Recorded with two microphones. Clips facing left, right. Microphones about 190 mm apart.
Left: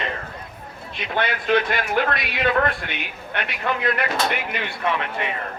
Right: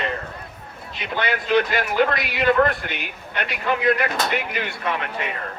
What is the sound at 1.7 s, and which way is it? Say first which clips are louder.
Speech: right 2 dB; 60° left (ahead or behind).